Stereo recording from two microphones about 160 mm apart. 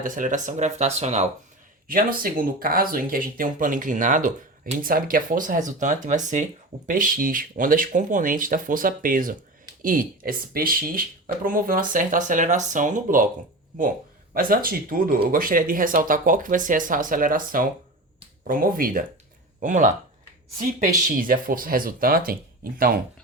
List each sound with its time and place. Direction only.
0.0 s speech: 55° right (ahead or behind)
1.9 s speech: 60° right (ahead or behind)
14.3 s speech: 65° right (ahead or behind)